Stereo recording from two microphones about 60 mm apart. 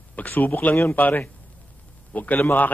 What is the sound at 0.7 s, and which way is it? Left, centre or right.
A man's voice, left.